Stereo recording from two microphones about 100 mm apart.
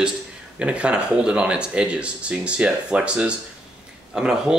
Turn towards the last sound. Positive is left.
turn(degrees=-5)  # may be behind; listen again after turning